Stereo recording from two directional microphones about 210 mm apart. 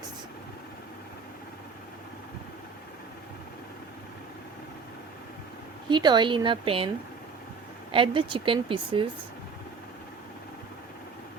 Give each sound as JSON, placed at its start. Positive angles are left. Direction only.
{"t": 5.9, "sound": "speech", "side_deg": -20}
{"t": 7.9, "sound": "speech", "side_deg": -25}